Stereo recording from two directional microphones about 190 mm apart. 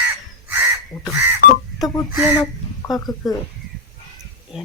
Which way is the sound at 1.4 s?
50° left (ahead or behind).